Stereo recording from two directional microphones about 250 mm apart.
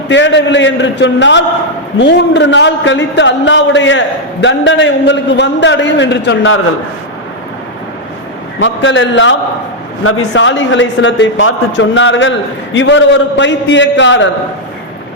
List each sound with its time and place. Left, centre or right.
0.1 s a man's voice: left
8.5 s a man's voice: left